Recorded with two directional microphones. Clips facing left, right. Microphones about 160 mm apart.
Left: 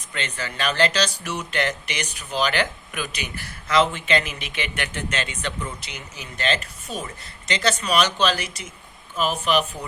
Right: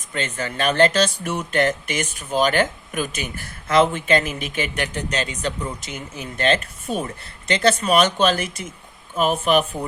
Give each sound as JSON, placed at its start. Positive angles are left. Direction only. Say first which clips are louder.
{"t": 0.1, "sound": "speech", "louder": "right 4 dB", "side_deg": -45}
{"t": 5.8, "sound": "speech", "louder": "right 6 dB", "side_deg": -50}